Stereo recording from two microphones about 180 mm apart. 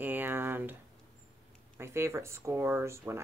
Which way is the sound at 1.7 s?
15° right (ahead or behind).